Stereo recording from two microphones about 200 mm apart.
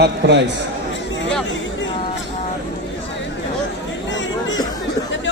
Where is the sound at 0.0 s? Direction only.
60° right (ahead or behind).